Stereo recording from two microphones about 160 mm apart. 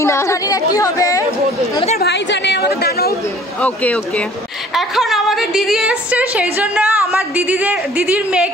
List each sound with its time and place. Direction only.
0.0 s speech: 20° left (ahead or behind)
2.0 s a sound: 90° left
3.6 s a woman's voice: 10° left (ahead or behind); by 8.5 s 5° right (ahead or behind)